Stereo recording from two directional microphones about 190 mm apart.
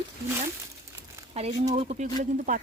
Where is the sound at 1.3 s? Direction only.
35° right (ahead or behind).